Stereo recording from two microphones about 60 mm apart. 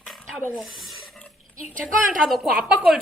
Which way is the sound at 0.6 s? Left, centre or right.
Centre.